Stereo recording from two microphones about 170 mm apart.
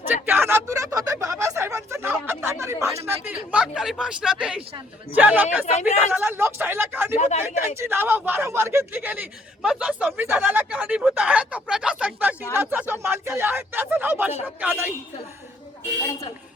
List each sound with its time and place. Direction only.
0.3 s a sound: 15° right (ahead or behind)
2.2 s speech: 15° right (ahead or behind)
5.7 s speech: 40° left (ahead or behind)
6.0 s speech: 10° right (ahead or behind)
7.2 s speech: 45° left (ahead or behind)
7.8 s speech: 15° right (ahead or behind)